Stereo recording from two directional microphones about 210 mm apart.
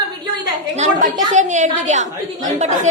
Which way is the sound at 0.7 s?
35° right (ahead or behind).